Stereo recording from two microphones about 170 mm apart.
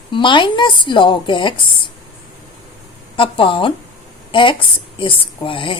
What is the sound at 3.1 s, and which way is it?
Speech, 30° left (ahead or behind).